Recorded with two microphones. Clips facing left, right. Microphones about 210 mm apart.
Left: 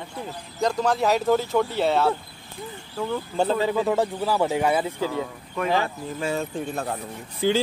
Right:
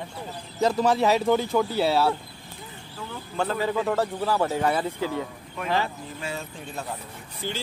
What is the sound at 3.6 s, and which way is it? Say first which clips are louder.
Speech: left 2 dB; 10° left (ahead or behind).